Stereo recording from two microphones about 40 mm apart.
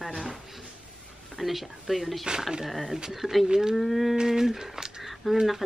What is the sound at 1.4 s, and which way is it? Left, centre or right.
Speech, centre.